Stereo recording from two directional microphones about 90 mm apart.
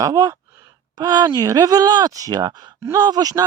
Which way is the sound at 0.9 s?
50° right (ahead or behind).